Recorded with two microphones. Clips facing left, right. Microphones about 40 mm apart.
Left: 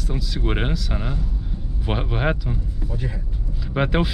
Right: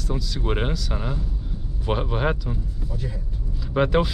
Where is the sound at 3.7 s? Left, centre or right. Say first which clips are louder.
Right 1 dB; centre.